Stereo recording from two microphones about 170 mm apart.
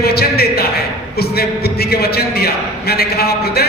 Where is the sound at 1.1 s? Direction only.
65° left (ahead or behind).